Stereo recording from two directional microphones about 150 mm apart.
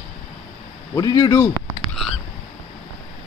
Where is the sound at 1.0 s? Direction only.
25° left (ahead or behind).